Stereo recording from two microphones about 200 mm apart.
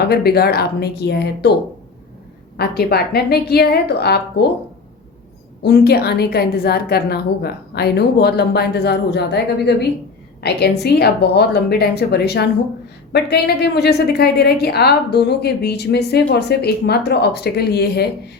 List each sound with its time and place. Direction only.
0.0 s a woman's voice: 50° left (ahead or behind)
2.6 s a woman's voice: 50° left (ahead or behind)
5.6 s a woman's voice: 55° left (ahead or behind)